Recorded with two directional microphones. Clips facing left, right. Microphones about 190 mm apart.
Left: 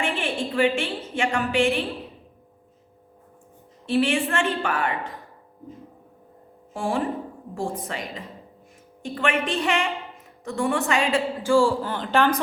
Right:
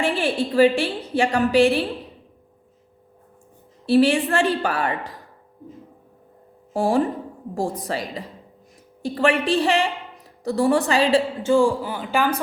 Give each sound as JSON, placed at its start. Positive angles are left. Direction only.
{"t": 0.0, "sound": "a woman's voice", "side_deg": -35}
{"t": 3.8, "sound": "a woman's voice", "side_deg": -35}
{"t": 6.7, "sound": "a woman's voice", "side_deg": -35}
{"t": 11.4, "sound": "a man's voice", "side_deg": -20}